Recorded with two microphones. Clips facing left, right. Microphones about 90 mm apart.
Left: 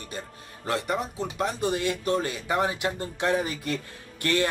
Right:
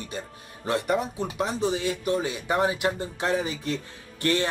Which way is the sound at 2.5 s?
25° right (ahead or behind).